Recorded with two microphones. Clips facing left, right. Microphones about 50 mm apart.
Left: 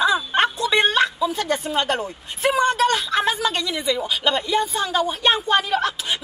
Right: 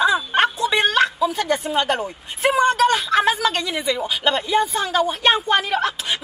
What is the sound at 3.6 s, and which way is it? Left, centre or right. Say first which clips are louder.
Speech: even; right.